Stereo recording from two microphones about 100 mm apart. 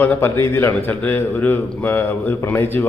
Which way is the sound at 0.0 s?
20° left (ahead or behind).